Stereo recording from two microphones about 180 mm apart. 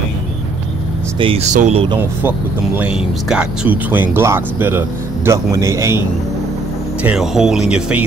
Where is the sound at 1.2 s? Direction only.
35° right (ahead or behind).